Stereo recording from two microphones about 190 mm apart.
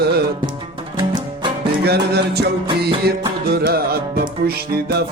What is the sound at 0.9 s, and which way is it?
Music, 25° right (ahead or behind).